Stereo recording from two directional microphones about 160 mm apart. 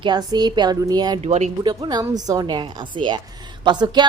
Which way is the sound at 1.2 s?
45° right (ahead or behind).